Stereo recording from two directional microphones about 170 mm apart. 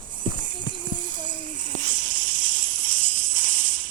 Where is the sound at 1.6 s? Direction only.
50° right (ahead or behind).